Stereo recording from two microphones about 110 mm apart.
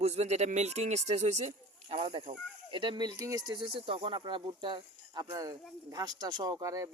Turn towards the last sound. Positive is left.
turn(degrees=-30)  # may be behind; listen again after turning